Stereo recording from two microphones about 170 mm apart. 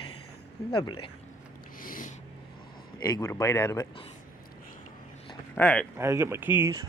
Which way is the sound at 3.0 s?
20° left (ahead or behind).